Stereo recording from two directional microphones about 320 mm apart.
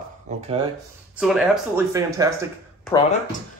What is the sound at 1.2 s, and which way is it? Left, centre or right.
Speech, centre.